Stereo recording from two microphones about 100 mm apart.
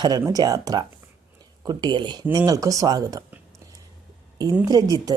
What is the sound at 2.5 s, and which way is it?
Speech, 35° right (ahead or behind).